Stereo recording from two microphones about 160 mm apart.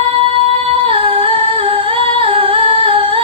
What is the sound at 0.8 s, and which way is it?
Humming, 35° right (ahead or behind).